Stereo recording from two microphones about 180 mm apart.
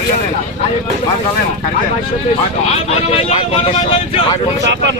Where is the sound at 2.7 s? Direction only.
35° left (ahead or behind).